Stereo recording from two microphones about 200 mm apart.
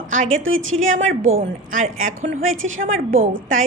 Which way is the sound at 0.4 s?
80° right.